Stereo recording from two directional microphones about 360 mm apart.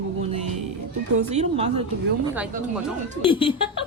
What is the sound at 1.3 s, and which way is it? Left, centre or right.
Speech, centre.